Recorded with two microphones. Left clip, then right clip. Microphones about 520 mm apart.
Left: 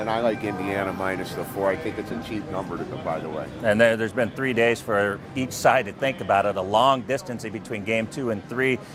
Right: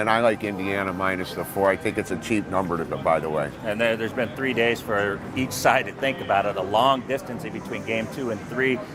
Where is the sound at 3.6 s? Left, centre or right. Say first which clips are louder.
Left 8 dB; left.